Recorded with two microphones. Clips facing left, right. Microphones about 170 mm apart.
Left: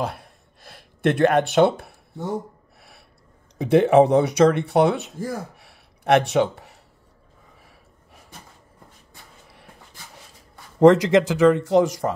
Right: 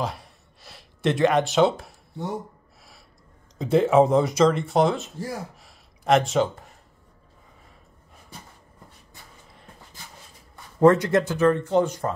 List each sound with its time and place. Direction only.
0.0 s a sound: 55° left (ahead or behind)
3.5 s speech: 70° left (ahead or behind)
10.8 s speech: 90° left